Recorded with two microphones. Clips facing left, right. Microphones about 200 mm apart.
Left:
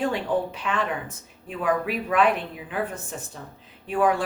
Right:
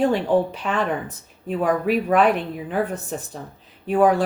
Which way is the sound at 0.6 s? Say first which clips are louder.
Right 4 dB; 40° right (ahead or behind).